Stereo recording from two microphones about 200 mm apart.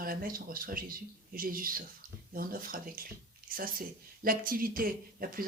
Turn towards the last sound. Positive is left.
turn(degrees=-45)  # may be behind; listen again after turning